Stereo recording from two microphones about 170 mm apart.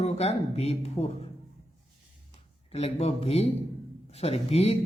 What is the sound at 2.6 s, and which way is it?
Speech, 35° left (ahead or behind).